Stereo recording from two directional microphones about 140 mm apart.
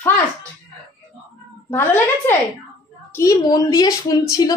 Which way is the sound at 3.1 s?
25° left (ahead or behind).